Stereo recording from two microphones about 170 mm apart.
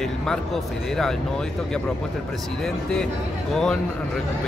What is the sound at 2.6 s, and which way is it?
Speech, 5° left (ahead or behind).